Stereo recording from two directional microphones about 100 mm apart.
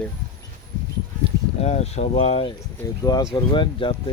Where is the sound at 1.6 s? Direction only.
90° left.